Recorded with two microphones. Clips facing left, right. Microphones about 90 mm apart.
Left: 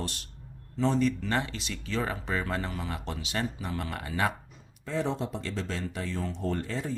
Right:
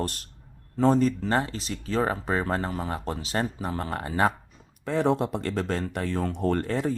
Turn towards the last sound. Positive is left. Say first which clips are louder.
# right 7 dB
turn(degrees=-60)  # may be behind; listen again after turning